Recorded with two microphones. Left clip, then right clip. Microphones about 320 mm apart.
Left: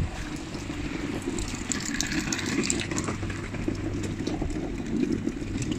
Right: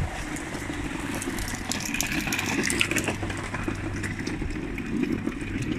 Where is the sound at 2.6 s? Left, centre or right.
Right.